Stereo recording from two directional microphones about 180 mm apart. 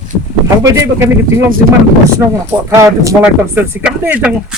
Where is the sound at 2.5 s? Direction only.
15° right (ahead or behind).